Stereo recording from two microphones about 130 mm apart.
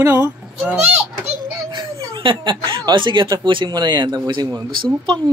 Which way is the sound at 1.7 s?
35° right (ahead or behind).